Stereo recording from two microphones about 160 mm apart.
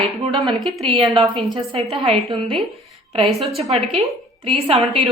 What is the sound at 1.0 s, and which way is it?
A woman's voice, 35° right (ahead or behind).